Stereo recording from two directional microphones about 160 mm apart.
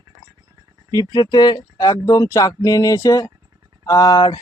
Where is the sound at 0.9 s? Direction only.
30° left (ahead or behind).